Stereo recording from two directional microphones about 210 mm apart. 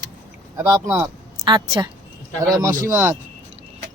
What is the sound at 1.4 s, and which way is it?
A woman's voice, 25° right (ahead or behind).